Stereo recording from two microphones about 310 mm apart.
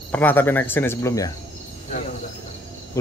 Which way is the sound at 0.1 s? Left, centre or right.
Centre.